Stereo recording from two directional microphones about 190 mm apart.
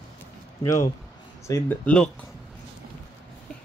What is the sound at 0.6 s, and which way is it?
Speech, 15° left (ahead or behind).